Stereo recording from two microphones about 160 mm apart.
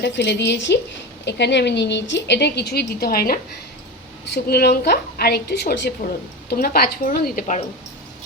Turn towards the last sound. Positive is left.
turn(degrees=70)  # may be behind; listen again after turning